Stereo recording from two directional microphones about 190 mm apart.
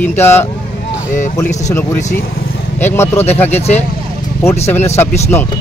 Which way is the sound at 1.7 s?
15° left (ahead or behind).